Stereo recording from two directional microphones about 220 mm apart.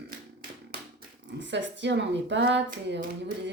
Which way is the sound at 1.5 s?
55° right (ahead or behind).